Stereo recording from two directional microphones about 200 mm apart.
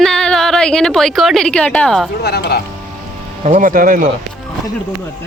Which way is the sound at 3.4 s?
40° right (ahead or behind).